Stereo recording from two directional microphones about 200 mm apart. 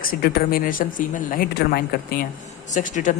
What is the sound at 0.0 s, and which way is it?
A woman's voice, 45° left (ahead or behind).